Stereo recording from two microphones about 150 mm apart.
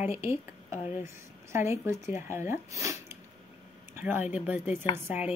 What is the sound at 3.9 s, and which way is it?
Speech, 15° right (ahead or behind).